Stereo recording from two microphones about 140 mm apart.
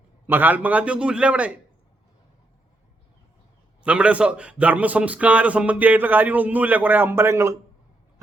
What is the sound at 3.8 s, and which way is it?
A man's voice, 10° right (ahead or behind).